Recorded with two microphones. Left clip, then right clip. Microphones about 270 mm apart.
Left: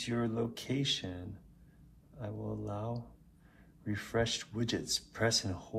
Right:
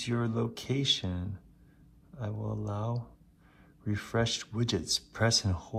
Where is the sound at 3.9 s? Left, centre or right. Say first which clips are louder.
Right 2 dB; right.